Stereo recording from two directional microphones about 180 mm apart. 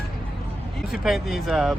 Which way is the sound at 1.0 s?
Centre (ahead or behind).